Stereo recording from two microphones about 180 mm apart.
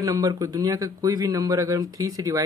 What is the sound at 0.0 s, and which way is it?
Speech, 20° right (ahead or behind).